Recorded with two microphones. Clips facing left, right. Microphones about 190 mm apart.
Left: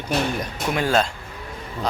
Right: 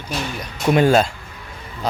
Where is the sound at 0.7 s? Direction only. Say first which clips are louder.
Right 7 dB; 20° right (ahead or behind).